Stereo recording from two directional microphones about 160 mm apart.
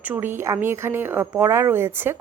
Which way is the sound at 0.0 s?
10° right (ahead or behind).